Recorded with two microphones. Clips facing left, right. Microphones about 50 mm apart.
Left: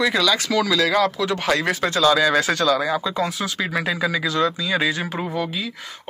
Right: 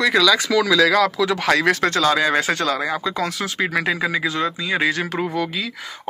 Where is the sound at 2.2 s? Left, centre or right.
Right.